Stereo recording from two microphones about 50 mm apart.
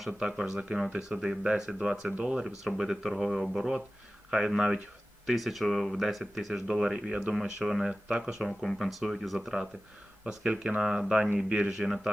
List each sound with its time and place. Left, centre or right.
0.1 s speech: centre
2.6 s speech: centre
8.4 s speech: centre
10.2 s speech: centre
10.8 s speech: centre